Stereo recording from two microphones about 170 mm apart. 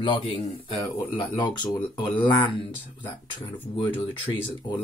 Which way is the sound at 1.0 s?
20° left (ahead or behind).